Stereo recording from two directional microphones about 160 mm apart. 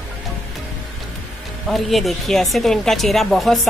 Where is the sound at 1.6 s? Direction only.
Centre (ahead or behind).